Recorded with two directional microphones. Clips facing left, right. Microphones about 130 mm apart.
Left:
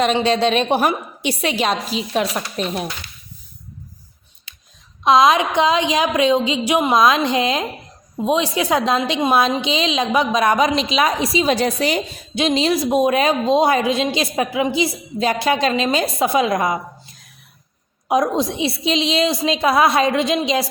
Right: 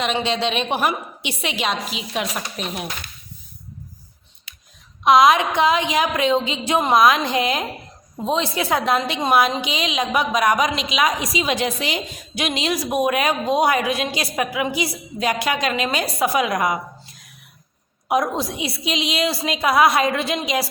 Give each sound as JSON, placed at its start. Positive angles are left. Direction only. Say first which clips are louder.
{"t": 0.0, "sound": "a woman's voice", "louder": "left 5 dB", "side_deg": 40}
{"t": 4.5, "sound": "a sound", "louder": "even", "side_deg": 25}
{"t": 5.0, "sound": "a woman's voice", "louder": "even", "side_deg": 25}
{"t": 18.1, "sound": "a woman's voice", "louder": "left 3 dB", "side_deg": 25}